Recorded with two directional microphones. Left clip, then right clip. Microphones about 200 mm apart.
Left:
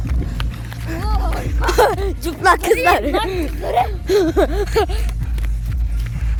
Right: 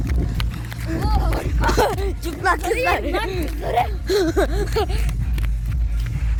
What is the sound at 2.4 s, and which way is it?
Speech, 55° left (ahead or behind).